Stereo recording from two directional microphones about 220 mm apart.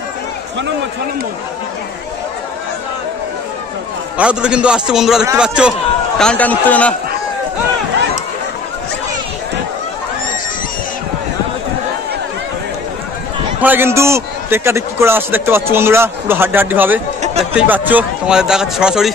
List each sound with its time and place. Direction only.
4.2 s a man's voice: 5° right (ahead or behind)
13.6 s a man's voice: 10° right (ahead or behind)
17.2 s chatter: 30° right (ahead or behind)
17.6 s speech: 10° right (ahead or behind)